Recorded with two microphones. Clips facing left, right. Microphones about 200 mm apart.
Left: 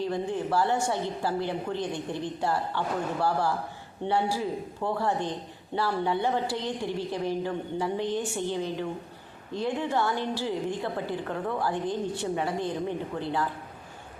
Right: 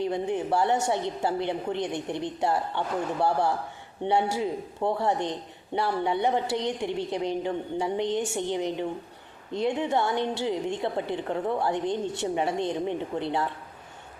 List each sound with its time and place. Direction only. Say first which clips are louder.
0.0 s a woman's voice: right 2 dB; 20° right (ahead or behind)